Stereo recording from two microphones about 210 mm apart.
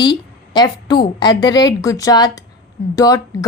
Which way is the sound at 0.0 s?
20° left (ahead or behind).